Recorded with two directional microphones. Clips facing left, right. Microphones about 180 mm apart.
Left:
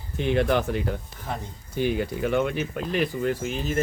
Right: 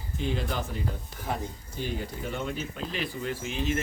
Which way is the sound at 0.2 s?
65° left (ahead or behind).